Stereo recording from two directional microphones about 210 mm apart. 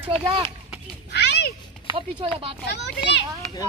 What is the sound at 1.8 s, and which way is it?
Speech, 25° right (ahead or behind).